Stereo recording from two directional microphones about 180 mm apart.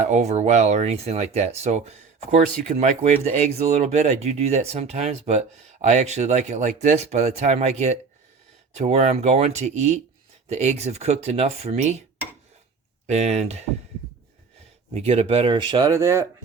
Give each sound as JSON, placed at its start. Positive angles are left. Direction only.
{"t": 0.0, "sound": "speech", "side_deg": -40}
{"t": 13.1, "sound": "speech", "side_deg": -35}
{"t": 14.9, "sound": "speech", "side_deg": -35}